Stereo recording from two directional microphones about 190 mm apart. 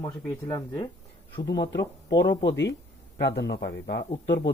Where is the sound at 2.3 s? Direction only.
25° left (ahead or behind).